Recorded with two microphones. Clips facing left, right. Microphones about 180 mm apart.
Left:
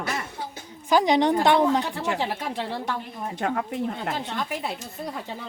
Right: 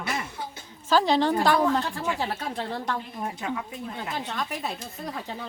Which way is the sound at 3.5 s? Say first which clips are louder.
Left 5 dB; 60° left (ahead or behind).